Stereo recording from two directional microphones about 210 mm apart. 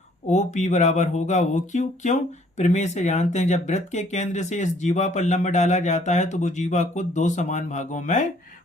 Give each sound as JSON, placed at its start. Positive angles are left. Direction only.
{"t": 0.3, "sound": "speech", "side_deg": 35}